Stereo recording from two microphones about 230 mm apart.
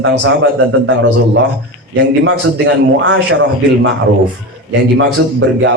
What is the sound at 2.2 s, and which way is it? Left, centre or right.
A man's voice, right.